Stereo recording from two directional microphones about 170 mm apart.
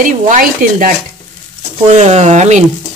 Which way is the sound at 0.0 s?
55° right (ahead or behind).